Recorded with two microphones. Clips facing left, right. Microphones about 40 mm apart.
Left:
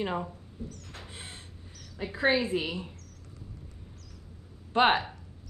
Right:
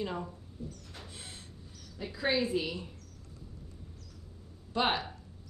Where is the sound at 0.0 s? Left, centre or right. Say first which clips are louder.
Left 4 dB; left.